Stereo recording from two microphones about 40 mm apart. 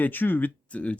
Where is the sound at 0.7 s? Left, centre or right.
Left.